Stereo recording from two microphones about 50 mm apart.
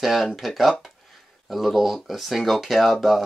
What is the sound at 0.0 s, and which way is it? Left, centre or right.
Speech, centre.